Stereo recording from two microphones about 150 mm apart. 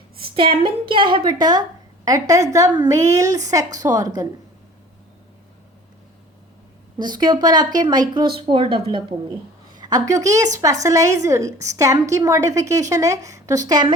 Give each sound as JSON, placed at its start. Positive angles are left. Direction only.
{"t": 0.2, "sound": "a woman's voice", "side_deg": -35}
{"t": 6.9, "sound": "a woman's voice", "side_deg": -30}